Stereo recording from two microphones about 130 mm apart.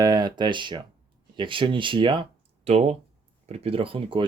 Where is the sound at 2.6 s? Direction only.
55° right (ahead or behind).